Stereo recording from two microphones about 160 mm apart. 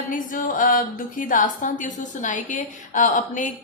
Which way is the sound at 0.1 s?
55° left (ahead or behind).